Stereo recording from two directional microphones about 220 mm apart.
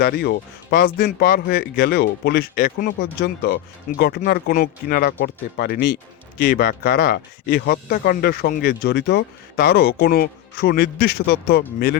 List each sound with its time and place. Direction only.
0.0 s speech: 45° left (ahead or behind)